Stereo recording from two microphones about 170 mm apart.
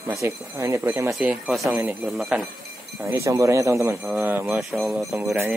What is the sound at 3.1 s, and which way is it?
Speech, 15° right (ahead or behind).